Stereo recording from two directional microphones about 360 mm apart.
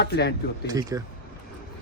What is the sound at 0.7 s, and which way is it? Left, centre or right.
Speech, centre.